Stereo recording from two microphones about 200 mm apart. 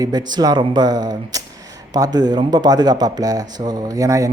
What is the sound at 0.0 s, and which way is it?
Speech, 20° right (ahead or behind).